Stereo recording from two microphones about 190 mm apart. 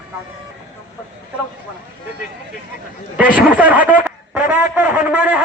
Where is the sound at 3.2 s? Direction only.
10° right (ahead or behind).